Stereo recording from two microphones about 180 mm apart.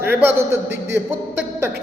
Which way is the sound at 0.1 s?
10° right (ahead or behind).